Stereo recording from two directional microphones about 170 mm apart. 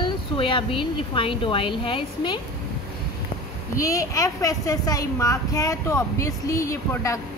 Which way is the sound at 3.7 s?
20° left (ahead or behind).